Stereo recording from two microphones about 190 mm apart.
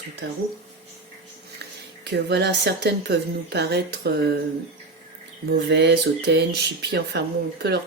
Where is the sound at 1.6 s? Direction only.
60° right (ahead or behind).